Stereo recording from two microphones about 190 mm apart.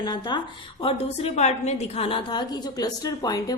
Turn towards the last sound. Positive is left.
turn(degrees=20)  # may be behind; listen again after turning